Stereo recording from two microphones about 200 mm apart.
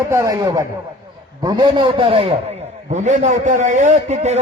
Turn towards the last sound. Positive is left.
turn(degrees=-35)  # may be behind; listen again after turning